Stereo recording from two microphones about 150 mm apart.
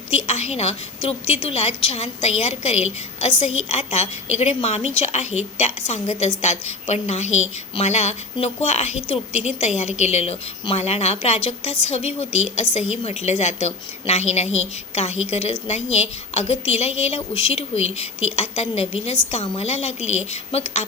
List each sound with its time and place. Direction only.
0.3 s a woman's voice: 45° left (ahead or behind)